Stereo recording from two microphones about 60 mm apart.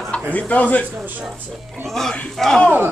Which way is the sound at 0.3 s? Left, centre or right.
Left.